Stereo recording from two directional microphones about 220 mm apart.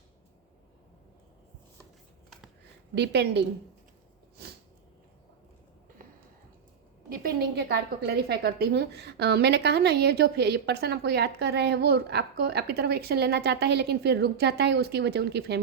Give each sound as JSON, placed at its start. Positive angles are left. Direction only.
{"t": 2.9, "sound": "a woman's voice", "side_deg": -50}
{"t": 7.1, "sound": "a woman's voice", "side_deg": -40}